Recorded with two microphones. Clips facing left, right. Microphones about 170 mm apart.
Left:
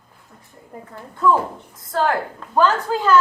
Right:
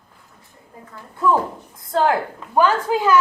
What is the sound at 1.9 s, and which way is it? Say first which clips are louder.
A woman's voice: right 2 dB; 20° right (ahead or behind).